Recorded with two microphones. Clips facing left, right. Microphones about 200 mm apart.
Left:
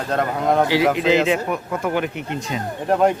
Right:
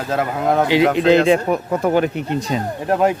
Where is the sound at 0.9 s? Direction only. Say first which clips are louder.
Right 4 dB; 5° left (ahead or behind).